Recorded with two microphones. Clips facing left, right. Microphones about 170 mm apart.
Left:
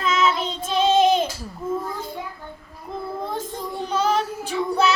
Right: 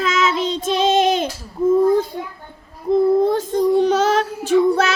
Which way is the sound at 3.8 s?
90° right.